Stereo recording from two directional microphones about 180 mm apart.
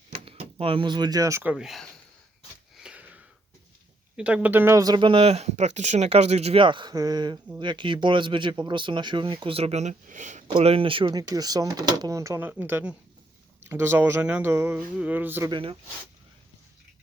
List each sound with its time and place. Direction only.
0.1 s speech: 30° right (ahead or behind); by 1.9 s centre (ahead or behind)
2.8 s sniff: 10° right (ahead or behind)
4.2 s speech: 5° right (ahead or behind); by 10.4 s 40° right (ahead or behind)
10.5 s speech: 30° right (ahead or behind); by 15.4 s 10° right (ahead or behind)
15.4 s speech: 30° right (ahead or behind)